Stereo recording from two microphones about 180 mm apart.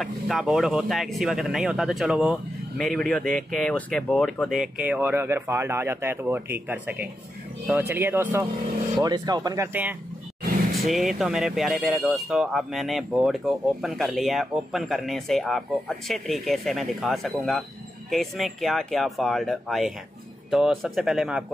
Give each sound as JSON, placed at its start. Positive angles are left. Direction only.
{"t": 0.0, "sound": "speech", "side_deg": 0}